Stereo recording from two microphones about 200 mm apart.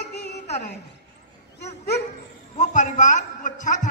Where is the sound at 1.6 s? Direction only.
50° left (ahead or behind).